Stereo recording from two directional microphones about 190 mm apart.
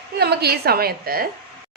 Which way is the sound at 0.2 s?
55° right (ahead or behind).